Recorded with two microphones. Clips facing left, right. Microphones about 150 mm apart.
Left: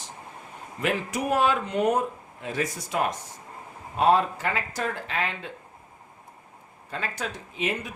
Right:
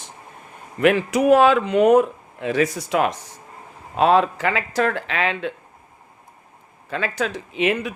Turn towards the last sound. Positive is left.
turn(degrees=-75)  # may be behind; listen again after turning